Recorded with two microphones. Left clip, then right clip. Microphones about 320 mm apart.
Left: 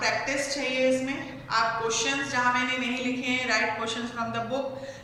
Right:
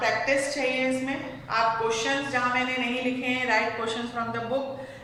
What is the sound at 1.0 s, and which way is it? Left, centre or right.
A woman's voice, centre.